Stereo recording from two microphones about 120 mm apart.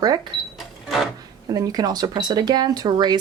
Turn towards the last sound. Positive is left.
turn(degrees=-35)  # may be behind; listen again after turning